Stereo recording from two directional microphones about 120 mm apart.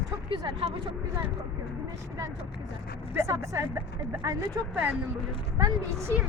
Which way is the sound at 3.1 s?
25° right (ahead or behind).